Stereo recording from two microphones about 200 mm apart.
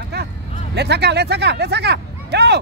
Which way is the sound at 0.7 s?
55° right (ahead or behind).